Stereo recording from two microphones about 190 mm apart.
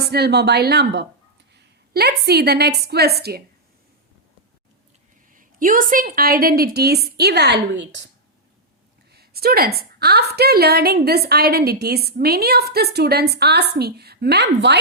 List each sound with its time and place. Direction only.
0.0 s a woman's voice: 60° right (ahead or behind)
5.3 s a woman's voice: 45° right (ahead or behind); by 8.1 s 70° right (ahead or behind)
9.1 s a woman's voice: 55° right (ahead or behind)